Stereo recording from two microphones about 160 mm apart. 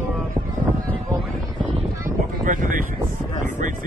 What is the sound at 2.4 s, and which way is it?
Speech, 55° right (ahead or behind).